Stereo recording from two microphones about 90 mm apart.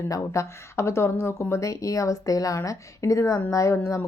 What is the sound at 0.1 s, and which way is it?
Speech, 35° left (ahead or behind).